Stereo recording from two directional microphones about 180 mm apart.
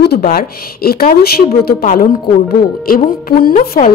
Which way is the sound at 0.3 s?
60° left (ahead or behind).